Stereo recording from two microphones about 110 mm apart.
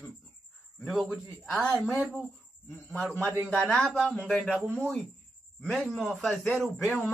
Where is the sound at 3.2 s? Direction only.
20° right (ahead or behind).